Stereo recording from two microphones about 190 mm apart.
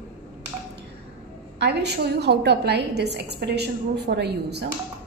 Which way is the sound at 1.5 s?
60° right (ahead or behind).